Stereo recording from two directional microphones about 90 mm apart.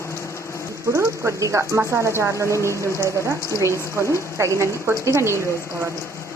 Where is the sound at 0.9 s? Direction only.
30° right (ahead or behind).